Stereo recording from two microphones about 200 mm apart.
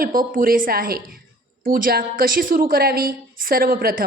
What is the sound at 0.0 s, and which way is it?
A woman's voice, 45° right (ahead or behind).